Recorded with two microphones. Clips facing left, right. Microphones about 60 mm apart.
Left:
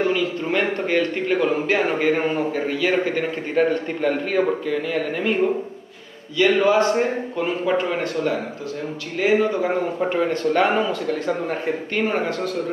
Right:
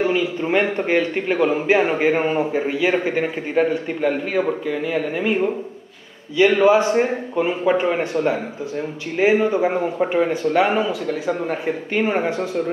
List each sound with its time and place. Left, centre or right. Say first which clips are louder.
0.0 s a man's voice: right 1 dB; centre